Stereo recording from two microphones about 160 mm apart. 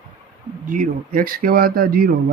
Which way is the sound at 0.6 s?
60° right (ahead or behind).